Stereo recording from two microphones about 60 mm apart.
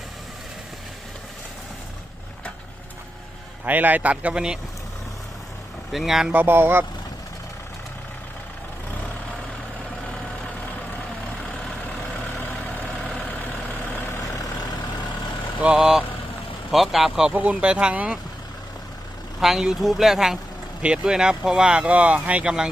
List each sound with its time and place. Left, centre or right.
3.7 s speech: right
5.9 s speech: centre
6.3 s speech: right
15.6 s speech: centre
17.3 s speech: right
19.4 s speech: centre
20.8 s speech: centre